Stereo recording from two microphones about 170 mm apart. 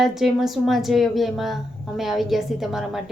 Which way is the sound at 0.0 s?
Centre (ahead or behind).